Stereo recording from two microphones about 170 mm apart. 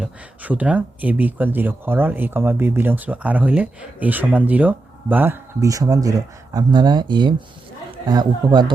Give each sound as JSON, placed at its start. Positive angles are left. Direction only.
{"t": 0.0, "sound": "speech", "side_deg": -10}